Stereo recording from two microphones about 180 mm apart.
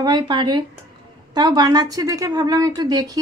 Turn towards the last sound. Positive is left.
turn(degrees=-20)  # may be behind; listen again after turning